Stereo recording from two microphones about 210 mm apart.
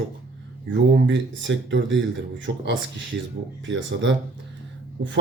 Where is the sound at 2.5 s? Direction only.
50° right (ahead or behind).